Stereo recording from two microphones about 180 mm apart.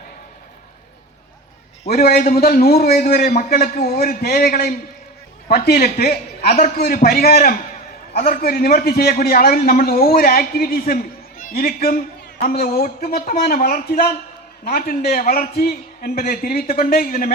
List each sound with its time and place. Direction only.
1.9 s a man's voice: 60° left (ahead or behind)